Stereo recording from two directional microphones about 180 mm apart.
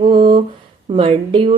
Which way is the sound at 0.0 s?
25° right (ahead or behind).